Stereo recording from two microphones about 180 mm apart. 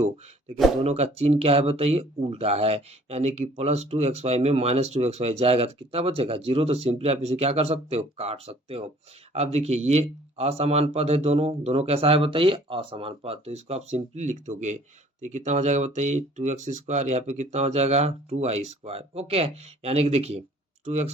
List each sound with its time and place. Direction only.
0.9 s speech: 35° right (ahead or behind)